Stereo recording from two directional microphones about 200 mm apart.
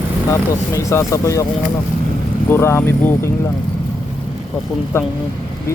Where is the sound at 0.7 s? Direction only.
15° left (ahead or behind).